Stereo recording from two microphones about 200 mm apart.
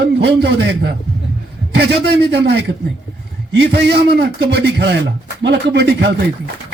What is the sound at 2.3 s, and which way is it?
A man's voice, 55° right (ahead or behind).